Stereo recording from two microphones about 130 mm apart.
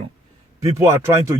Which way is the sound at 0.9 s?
20° right (ahead or behind).